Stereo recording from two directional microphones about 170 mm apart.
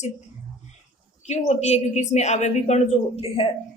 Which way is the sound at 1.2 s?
40° left (ahead or behind).